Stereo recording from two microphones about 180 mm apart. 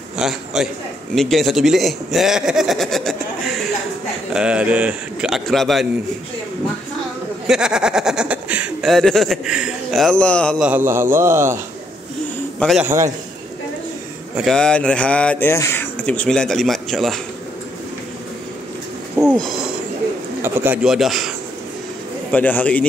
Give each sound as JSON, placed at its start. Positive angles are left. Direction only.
{"t": 0.2, "sound": "a man's voice", "side_deg": -5}
{"t": 4.3, "sound": "speech", "side_deg": -5}
{"t": 7.4, "sound": "speech", "side_deg": -5}
{"t": 10.7, "sound": "a man's voice", "side_deg": -10}
{"t": 12.5, "sound": "a man's voice", "side_deg": 0}
{"t": 12.8, "sound": "a man's voice", "side_deg": -15}
{"t": 14.3, "sound": "speech", "side_deg": 0}
{"t": 19.1, "sound": "a sound", "side_deg": 0}
{"t": 20.4, "sound": "speech", "side_deg": -10}
{"t": 22.3, "sound": "a man's voice", "side_deg": 10}